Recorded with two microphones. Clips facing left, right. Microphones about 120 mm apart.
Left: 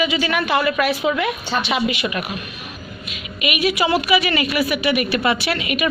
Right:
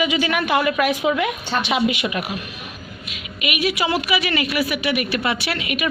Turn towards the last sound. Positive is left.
turn(degrees=-5)  # may be behind; listen again after turning